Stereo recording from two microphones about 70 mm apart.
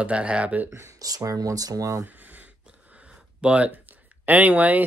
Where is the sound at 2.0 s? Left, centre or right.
Right.